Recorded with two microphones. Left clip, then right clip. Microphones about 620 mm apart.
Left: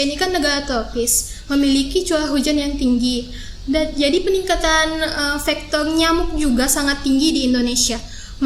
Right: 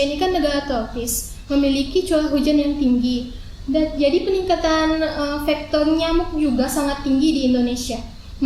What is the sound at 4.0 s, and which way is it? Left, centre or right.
A woman's voice, left.